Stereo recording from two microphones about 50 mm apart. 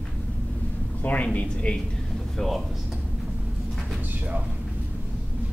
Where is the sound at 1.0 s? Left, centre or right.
Left.